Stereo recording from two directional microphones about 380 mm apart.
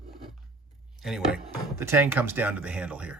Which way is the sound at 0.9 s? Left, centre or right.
Centre.